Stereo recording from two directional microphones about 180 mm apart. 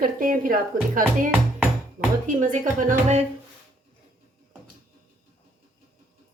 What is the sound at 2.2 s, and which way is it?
Speech, 45° right (ahead or behind).